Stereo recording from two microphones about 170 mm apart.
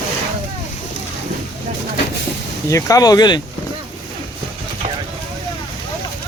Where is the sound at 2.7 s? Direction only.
20° left (ahead or behind).